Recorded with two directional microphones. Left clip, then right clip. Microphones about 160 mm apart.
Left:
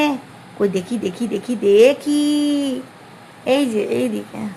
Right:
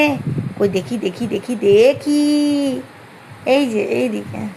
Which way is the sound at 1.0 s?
50° right (ahead or behind).